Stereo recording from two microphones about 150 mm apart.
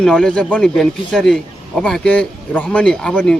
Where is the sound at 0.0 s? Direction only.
5° left (ahead or behind).